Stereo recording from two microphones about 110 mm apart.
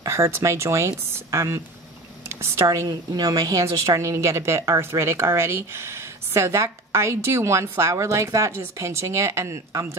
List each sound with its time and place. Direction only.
0.0 s a woman's voice: 25° right (ahead or behind)